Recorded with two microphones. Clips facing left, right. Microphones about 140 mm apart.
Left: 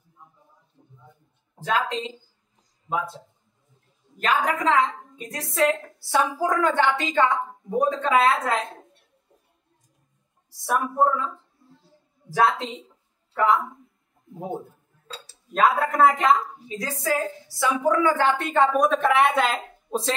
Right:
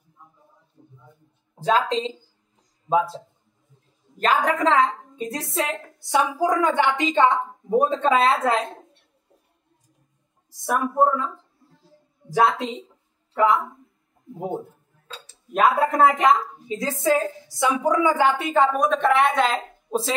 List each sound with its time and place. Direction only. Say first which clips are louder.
1.6 s speech: right 4 dB; 35° right (ahead or behind)
4.2 s a woman's voice: right 3 dB; 35° right (ahead or behind)
10.5 s a woman's voice: right 1 dB; 20° right (ahead or behind)
12.3 s a woman's voice: right 1 dB; 15° right (ahead or behind)
15.5 s a woman's voice: right 2 dB; 15° right (ahead or behind)
18.5 s speech: even; centre (ahead or behind)